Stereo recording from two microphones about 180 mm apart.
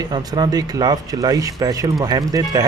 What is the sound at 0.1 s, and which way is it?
Speech, 20° right (ahead or behind).